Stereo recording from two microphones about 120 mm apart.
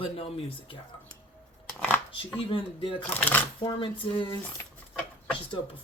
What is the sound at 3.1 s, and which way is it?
Speech, 15° left (ahead or behind).